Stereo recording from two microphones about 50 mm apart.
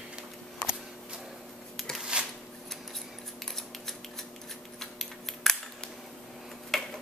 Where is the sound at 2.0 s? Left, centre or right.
Right.